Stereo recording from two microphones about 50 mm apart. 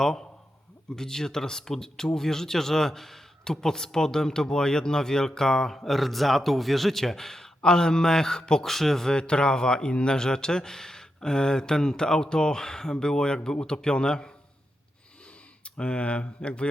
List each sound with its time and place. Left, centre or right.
0.0 s speech: centre
9.1 s speech: centre
15.6 s speech: left